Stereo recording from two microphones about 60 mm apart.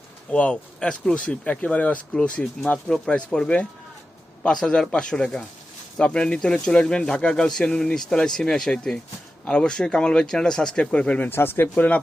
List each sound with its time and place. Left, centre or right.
0.3 s speech: centre
11.3 s speech: left